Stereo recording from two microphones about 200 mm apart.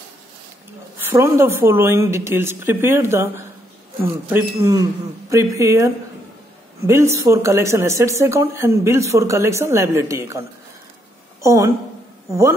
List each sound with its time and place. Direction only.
1.1 s speech: 15° right (ahead or behind)
6.9 s speech: 15° right (ahead or behind)
11.4 s speech: 15° right (ahead or behind)